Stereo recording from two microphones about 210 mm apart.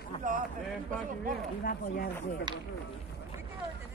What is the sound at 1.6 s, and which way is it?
Speech, 40° left (ahead or behind).